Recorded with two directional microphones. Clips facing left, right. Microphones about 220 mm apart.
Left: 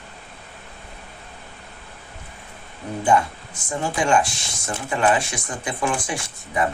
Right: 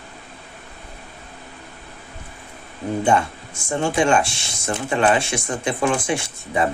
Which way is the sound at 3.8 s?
25° right (ahead or behind).